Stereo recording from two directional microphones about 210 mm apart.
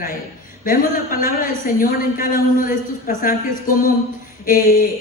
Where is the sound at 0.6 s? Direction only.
40° left (ahead or behind).